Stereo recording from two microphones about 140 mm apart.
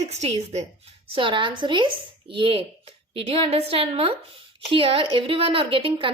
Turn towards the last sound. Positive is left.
turn(degrees=-40)  # may be behind; listen again after turning